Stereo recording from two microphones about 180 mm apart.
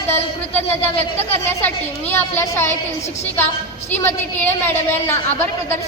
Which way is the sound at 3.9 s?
10° left (ahead or behind).